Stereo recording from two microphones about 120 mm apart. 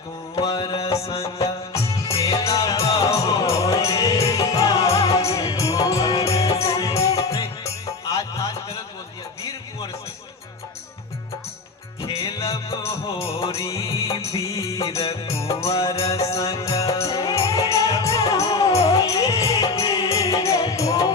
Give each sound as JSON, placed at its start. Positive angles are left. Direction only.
{"t": 0.3, "sound": "music", "side_deg": 35}
{"t": 1.0, "sound": "music", "side_deg": 55}
{"t": 2.0, "sound": "music", "side_deg": 30}
{"t": 12.0, "sound": "music", "side_deg": 40}
{"t": 13.2, "sound": "music", "side_deg": 55}
{"t": 13.6, "sound": "music", "side_deg": 25}
{"t": 15.3, "sound": "music", "side_deg": 55}
{"t": 15.6, "sound": "music", "side_deg": 30}